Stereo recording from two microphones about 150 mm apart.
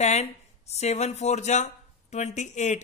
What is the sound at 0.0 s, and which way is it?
Speech, 45° left (ahead or behind).